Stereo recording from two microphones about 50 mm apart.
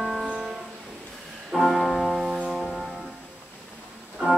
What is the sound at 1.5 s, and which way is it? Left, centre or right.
Music, centre.